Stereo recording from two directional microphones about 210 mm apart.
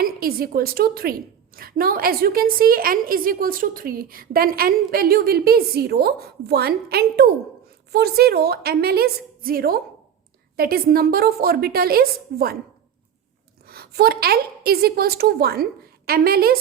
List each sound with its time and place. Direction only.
0.0 s a woman's voice: 45° right (ahead or behind)
13.7 s a woman's voice: 45° right (ahead or behind)